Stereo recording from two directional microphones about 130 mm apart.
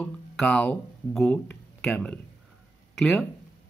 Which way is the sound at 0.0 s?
10° left (ahead or behind).